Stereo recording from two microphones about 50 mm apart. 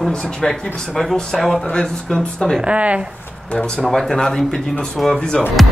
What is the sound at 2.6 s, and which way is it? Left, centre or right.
Speech, right.